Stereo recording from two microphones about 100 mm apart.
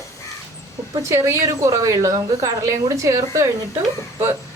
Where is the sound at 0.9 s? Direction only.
30° right (ahead or behind).